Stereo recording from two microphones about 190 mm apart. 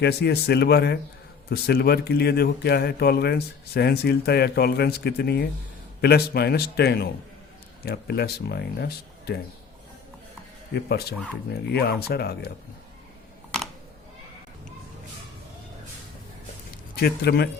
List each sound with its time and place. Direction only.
0.0 s speech: 60° left (ahead or behind)
10.8 s speech: 55° left (ahead or behind)
16.9 s speech: 55° left (ahead or behind)